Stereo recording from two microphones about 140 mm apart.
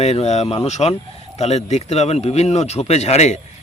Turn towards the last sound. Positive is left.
turn(degrees=50)  # may be behind; listen again after turning